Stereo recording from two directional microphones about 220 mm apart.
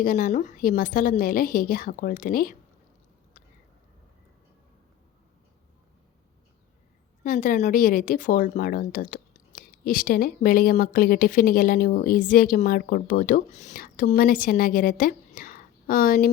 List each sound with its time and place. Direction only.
0.0 s speech: 35° left (ahead or behind)
7.3 s speech: 35° left (ahead or behind)